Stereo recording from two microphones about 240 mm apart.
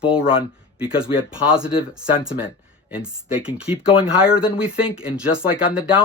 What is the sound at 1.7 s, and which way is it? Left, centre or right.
Speech, left.